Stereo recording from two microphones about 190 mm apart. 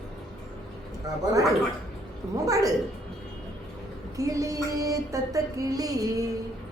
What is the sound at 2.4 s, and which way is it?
Speech, 15° right (ahead or behind).